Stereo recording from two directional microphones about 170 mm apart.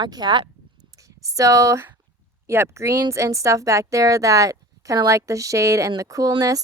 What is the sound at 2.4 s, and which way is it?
Speech, 15° right (ahead or behind).